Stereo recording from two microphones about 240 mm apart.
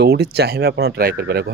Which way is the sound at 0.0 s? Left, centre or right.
Right.